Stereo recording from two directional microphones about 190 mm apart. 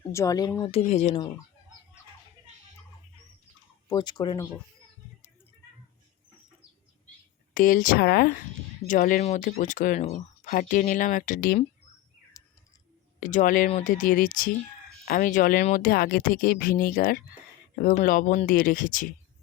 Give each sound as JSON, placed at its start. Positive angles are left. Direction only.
{"t": 0.1, "sound": "speech", "side_deg": 15}
{"t": 0.7, "sound": "speech", "side_deg": 35}
{"t": 3.8, "sound": "speech", "side_deg": 20}
{"t": 7.5, "sound": "speech", "side_deg": 45}
{"t": 12.4, "sound": "bird", "side_deg": 20}
{"t": 13.1, "sound": "speech", "side_deg": 40}